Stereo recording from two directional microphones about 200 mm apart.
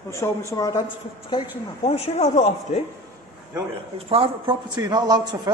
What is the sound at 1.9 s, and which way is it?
Speech, 30° left (ahead or behind).